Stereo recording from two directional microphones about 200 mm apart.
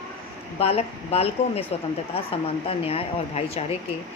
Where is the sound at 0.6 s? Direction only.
30° left (ahead or behind).